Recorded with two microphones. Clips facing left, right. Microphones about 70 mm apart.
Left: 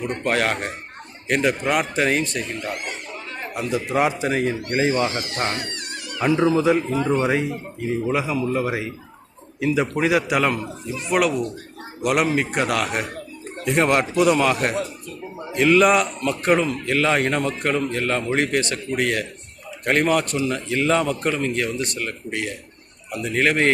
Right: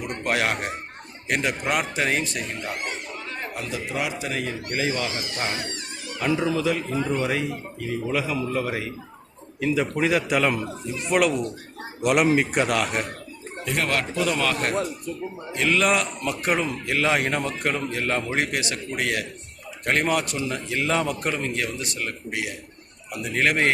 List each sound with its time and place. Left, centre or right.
0.3 s speech: centre
3.7 s speech: left
5.2 s speech: left
6.6 s a man's voice: left; by 13.1 s centre
13.7 s a man's voice: left; by 23.7 s centre